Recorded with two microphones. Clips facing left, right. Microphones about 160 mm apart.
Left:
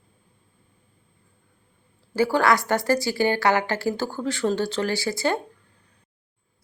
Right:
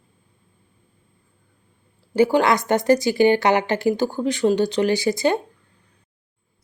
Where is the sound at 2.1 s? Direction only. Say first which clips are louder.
Right 3 dB; 15° right (ahead or behind).